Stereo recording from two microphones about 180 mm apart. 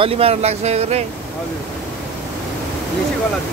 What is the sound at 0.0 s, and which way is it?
Speech, 35° right (ahead or behind).